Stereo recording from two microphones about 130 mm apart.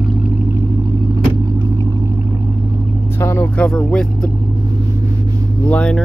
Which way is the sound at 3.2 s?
20° left (ahead or behind).